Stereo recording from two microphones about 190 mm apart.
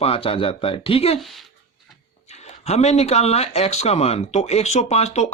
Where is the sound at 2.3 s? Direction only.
35° left (ahead or behind).